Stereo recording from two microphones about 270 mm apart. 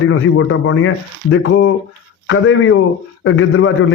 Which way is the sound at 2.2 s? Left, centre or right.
Left.